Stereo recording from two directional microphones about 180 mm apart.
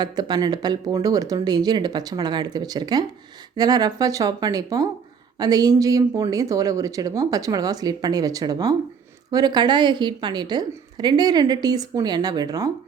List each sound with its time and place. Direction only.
0.0 s a woman's voice: 25° right (ahead or behind)